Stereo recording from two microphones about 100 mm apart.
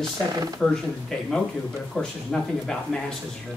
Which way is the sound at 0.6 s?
5° left (ahead or behind).